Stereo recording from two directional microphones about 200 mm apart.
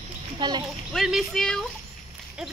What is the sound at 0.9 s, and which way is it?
Speech, centre (ahead or behind).